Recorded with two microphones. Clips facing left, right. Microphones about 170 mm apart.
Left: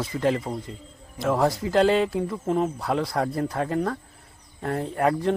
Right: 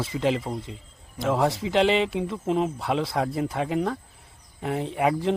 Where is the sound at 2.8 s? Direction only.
Centre (ahead or behind).